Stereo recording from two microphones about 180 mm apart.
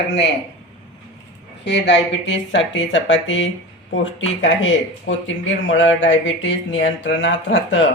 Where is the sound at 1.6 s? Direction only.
75° left (ahead or behind).